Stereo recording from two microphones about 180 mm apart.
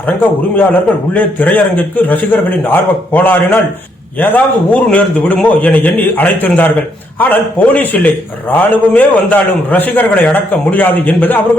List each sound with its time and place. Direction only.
0.5 s a man's voice: 10° left (ahead or behind)